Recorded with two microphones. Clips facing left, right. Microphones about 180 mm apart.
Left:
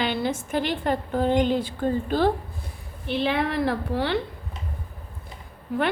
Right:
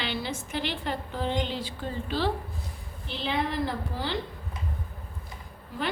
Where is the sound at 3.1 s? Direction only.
60° left (ahead or behind).